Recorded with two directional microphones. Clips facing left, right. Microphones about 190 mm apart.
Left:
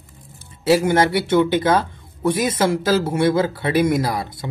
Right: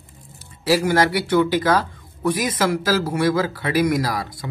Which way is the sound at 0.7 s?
25° left (ahead or behind).